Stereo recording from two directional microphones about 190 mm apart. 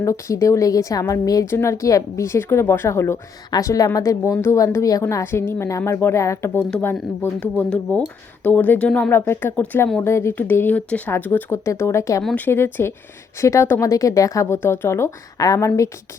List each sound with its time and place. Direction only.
0.0 s a woman's voice: 15° left (ahead or behind)